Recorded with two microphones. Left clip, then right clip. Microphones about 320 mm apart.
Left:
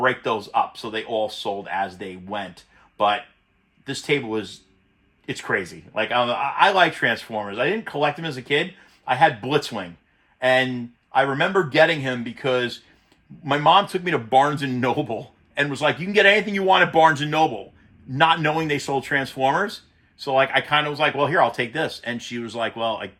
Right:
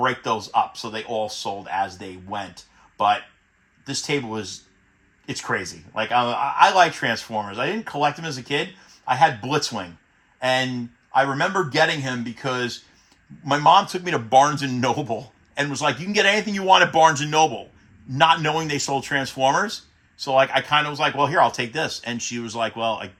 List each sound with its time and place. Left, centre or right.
0.0 s speech: centre
3.8 s speech: centre